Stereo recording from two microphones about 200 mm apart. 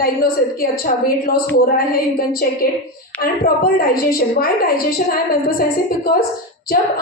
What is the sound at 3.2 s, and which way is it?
A woman's voice, 45° left (ahead or behind).